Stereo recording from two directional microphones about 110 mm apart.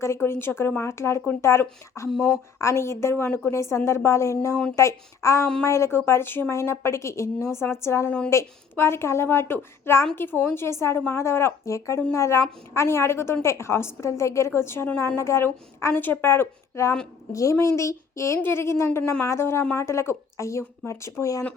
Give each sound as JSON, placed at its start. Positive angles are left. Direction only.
{"t": 0.0, "sound": "a woman's voice", "side_deg": 25}
{"t": 2.1, "sound": "speech", "side_deg": 5}
{"t": 2.6, "sound": "a woman's voice", "side_deg": 25}
{"t": 17.7, "sound": "a sound", "side_deg": 25}
{"t": 18.3, "sound": "a woman's voice", "side_deg": 20}